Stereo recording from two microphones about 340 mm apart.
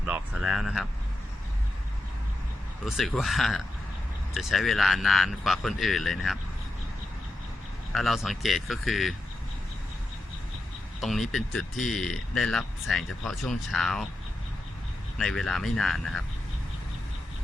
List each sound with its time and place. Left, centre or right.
0.0 s a sound: centre
2.8 s speech: centre
7.9 s speech: centre
11.0 s speech: centre
15.2 s speech: centre